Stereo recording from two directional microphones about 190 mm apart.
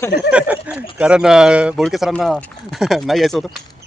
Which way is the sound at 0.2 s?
5° right (ahead or behind).